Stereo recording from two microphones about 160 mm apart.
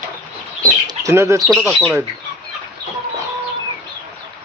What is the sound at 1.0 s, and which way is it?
Speech, 15° right (ahead or behind).